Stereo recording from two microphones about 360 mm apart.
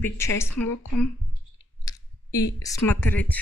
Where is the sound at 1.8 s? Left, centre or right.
Centre.